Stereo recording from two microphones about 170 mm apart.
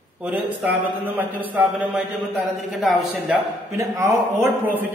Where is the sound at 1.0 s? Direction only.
10° right (ahead or behind).